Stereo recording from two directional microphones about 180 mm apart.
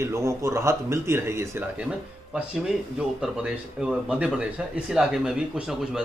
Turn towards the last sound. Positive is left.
turn(degrees=-5)  # may be behind; listen again after turning